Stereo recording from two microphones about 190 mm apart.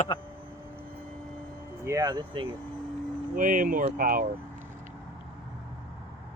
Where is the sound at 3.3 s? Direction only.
45° right (ahead or behind).